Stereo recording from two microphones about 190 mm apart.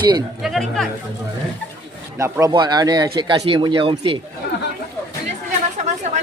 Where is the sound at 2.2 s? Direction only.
20° right (ahead or behind).